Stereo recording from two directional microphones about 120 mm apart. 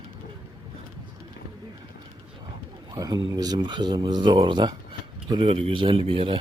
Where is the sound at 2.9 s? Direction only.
30° right (ahead or behind).